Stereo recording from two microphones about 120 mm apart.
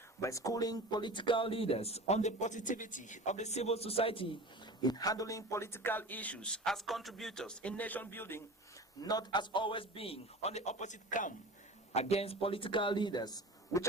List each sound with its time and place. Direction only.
0.2 s speech: 25° left (ahead or behind); by 4.7 s 50° left (ahead or behind)
4.8 s speech: 35° left (ahead or behind); by 8.4 s 20° left (ahead or behind)
9.0 s speech: 35° left (ahead or behind); by 11.3 s 90° left
11.9 s speech: 60° left (ahead or behind); by 13.8 s 35° left (ahead or behind)